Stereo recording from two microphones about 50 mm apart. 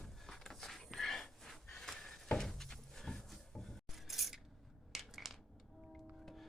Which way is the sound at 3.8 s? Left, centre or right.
Centre.